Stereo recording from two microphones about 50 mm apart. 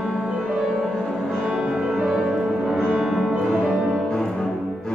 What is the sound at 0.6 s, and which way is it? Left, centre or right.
Music, centre.